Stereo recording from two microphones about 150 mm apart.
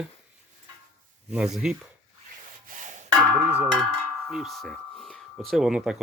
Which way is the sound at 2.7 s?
55° right (ahead or behind).